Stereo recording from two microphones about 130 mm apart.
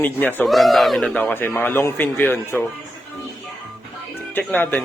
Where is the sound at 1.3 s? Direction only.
15° left (ahead or behind).